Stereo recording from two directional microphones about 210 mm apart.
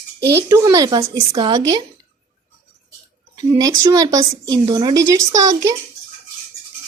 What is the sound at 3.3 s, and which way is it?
A woman's voice, 20° right (ahead or behind).